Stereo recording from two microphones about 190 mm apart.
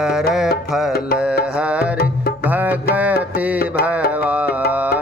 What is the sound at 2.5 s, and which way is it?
Music, 10° right (ahead or behind).